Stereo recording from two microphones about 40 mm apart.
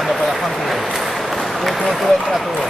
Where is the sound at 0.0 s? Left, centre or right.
Centre.